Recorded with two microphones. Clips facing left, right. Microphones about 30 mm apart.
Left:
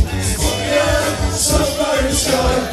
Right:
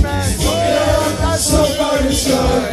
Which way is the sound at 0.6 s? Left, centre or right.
Centre.